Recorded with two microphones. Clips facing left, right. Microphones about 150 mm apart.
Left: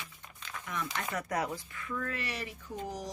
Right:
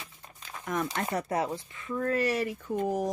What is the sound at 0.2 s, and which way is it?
Crumpling, 35° right (ahead or behind).